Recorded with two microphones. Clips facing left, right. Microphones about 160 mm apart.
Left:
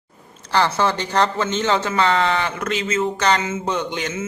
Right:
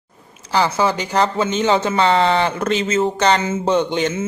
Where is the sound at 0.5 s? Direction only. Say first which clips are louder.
Right 1 dB; 10° right (ahead or behind).